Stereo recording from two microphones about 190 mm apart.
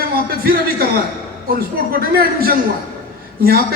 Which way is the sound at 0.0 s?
50° right (ahead or behind).